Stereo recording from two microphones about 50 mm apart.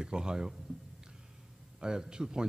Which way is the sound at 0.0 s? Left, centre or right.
Centre.